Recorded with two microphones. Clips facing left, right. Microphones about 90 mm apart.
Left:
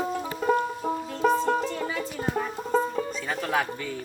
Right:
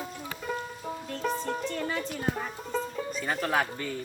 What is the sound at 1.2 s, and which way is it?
Music, 45° left (ahead or behind).